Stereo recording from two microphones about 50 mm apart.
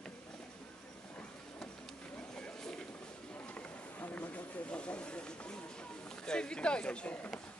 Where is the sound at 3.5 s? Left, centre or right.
Left.